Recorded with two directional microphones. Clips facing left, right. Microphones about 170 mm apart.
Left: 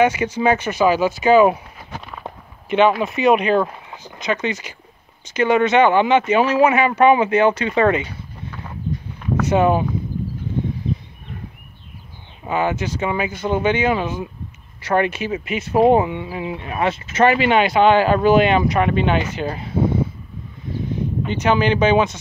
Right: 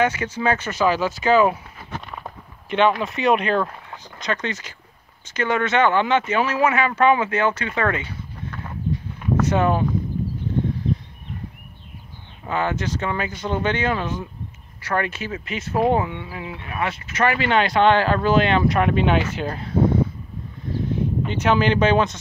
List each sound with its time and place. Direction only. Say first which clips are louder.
0.0 s speech: left 4 dB; 15° left (ahead or behind)
2.7 s speech: left 3 dB; 5° left (ahead or behind)
9.4 s speech: left 4 dB; 10° left (ahead or behind)
12.4 s speech: left 3 dB; 10° left (ahead or behind)
14.8 s speech: left 6 dB; 20° left (ahead or behind)
18.7 s speech: left 1 dB; centre (ahead or behind)
20.9 s speech: left 1 dB; centre (ahead or behind)